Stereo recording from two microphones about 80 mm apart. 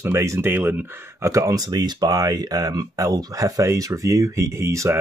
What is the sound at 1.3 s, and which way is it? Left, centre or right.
Speech, right.